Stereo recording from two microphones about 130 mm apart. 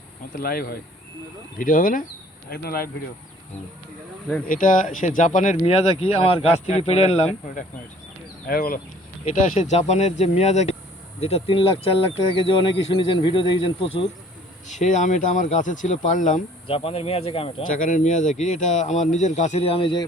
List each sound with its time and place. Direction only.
1.5 s speech: 90° left
4.4 s speech: 90° left
5.6 s speech: 50° left (ahead or behind)
8.5 s speech: 90° left
9.3 s speech: 75° left (ahead or behind); by 14.1 s 45° left (ahead or behind)
14.7 s speech: 70° left (ahead or behind)
16.6 s speech: 45° left (ahead or behind)
17.7 s speech: 85° left; by 20.1 s 40° left (ahead or behind)